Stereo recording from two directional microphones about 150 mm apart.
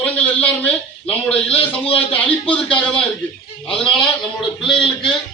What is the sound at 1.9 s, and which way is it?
Speech, 10° left (ahead or behind).